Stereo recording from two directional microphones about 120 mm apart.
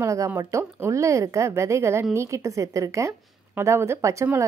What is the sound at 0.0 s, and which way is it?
Speech, 25° right (ahead or behind).